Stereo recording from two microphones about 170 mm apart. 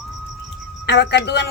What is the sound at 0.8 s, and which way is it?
Speech, 85° left.